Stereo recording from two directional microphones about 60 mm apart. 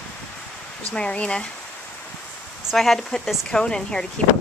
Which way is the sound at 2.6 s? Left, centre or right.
Centre.